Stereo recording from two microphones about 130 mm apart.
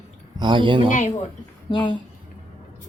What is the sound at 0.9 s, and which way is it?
Speech, 70° left (ahead or behind).